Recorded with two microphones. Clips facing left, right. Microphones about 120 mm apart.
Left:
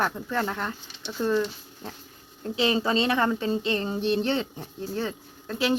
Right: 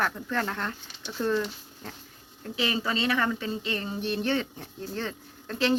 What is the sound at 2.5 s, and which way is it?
Speech, 25° left (ahead or behind).